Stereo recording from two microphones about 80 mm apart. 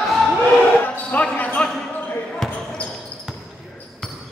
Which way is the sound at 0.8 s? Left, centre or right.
Centre.